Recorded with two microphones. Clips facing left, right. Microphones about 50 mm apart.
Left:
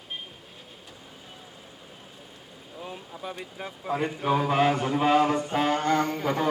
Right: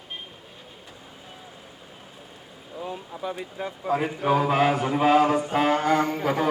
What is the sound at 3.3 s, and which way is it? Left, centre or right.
Speech, centre.